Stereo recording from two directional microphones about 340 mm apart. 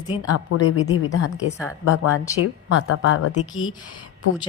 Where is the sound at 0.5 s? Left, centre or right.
Left.